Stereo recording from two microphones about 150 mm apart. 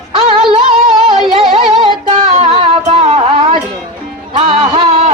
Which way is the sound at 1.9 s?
40° right (ahead or behind).